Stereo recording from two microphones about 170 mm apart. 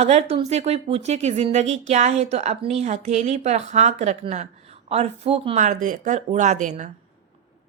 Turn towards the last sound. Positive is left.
turn(degrees=-45)  # may be behind; listen again after turning